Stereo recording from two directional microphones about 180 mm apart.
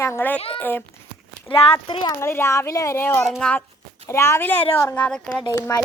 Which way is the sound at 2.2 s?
15° left (ahead or behind).